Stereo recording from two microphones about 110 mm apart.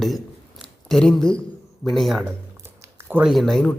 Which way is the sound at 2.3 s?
20° right (ahead or behind).